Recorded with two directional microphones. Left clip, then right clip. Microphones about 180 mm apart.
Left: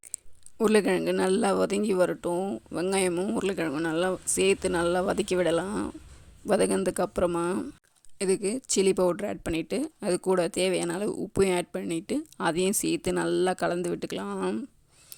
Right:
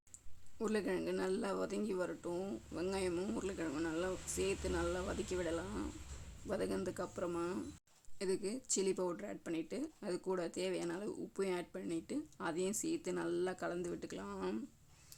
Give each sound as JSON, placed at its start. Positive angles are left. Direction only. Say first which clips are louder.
{"t": 0.6, "sound": "speech", "louder": "left 15 dB", "side_deg": 55}